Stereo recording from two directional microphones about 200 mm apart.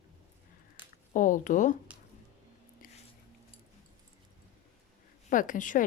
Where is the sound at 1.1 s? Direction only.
40° left (ahead or behind).